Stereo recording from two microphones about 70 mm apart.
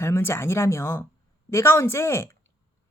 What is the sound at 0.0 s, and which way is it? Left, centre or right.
Speech, left.